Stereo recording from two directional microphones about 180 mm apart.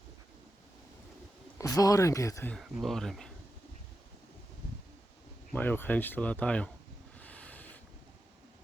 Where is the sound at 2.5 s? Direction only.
Centre (ahead or behind).